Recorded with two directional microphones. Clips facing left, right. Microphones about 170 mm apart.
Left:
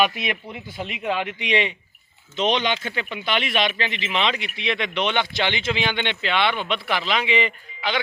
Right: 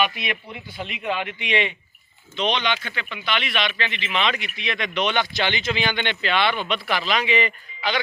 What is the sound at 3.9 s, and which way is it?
Speech, 30° left (ahead or behind).